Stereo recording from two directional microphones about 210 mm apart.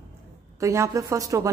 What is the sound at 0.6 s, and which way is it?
Speech, 15° right (ahead or behind).